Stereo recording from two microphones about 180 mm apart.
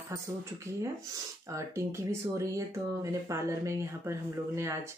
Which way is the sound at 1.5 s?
15° right (ahead or behind).